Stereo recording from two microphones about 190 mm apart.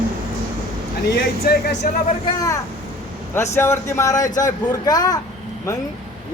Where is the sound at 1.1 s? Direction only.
60° left (ahead or behind).